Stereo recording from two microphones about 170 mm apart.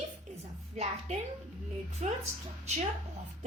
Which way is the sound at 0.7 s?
40° right (ahead or behind).